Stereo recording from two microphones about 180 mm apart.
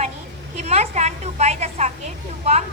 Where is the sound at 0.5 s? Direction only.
35° right (ahead or behind).